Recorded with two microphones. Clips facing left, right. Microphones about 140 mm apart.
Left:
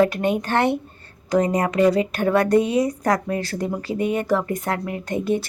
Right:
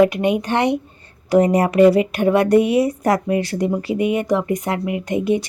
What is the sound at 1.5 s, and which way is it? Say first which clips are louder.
Speech: right 7 dB; 30° right (ahead or behind).